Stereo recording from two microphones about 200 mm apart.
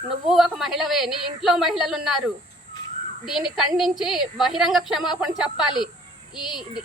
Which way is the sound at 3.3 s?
Centre (ahead or behind).